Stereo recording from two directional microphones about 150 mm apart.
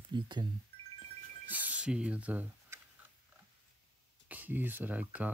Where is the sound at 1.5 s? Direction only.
10° right (ahead or behind).